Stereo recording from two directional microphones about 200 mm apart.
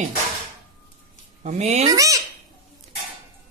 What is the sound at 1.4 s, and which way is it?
Speech, 35° right (ahead or behind).